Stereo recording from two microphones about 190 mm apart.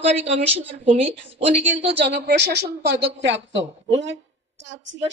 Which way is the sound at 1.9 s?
60° right (ahead or behind).